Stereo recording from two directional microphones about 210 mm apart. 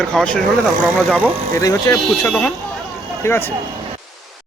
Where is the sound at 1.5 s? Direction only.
15° left (ahead or behind).